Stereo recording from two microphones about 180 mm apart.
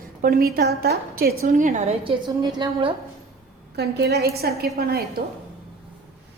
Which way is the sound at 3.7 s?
65° right (ahead or behind).